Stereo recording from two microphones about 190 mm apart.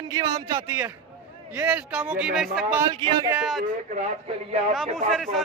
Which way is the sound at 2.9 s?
25° right (ahead or behind).